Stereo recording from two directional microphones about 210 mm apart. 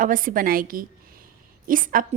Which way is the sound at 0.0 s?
40° right (ahead or behind).